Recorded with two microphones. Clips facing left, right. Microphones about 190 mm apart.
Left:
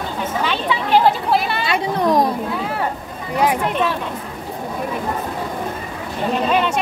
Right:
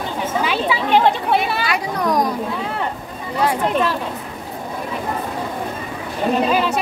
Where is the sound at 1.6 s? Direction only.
25° left (ahead or behind).